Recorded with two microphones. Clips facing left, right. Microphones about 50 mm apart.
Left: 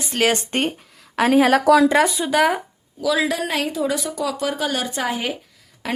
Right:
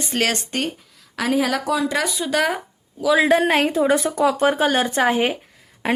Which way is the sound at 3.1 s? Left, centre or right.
Right.